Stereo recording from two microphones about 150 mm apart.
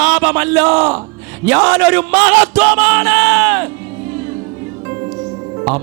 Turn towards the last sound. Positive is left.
turn(degrees=-20)  # may be behind; listen again after turning